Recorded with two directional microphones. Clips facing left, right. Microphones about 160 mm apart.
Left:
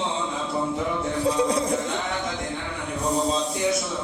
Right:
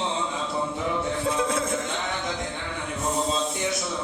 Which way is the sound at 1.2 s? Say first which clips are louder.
Left 6 dB; 35° left (ahead or behind).